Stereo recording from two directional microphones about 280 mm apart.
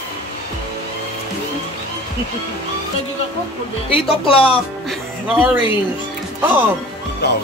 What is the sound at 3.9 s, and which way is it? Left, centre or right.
Speech, centre.